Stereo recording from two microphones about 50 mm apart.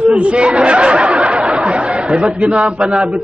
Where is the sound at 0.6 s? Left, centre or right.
Right.